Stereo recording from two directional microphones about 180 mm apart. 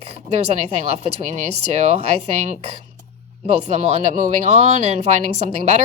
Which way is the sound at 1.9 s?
40° right (ahead or behind).